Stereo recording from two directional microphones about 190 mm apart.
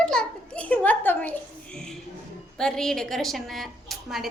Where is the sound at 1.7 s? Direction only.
5° left (ahead or behind).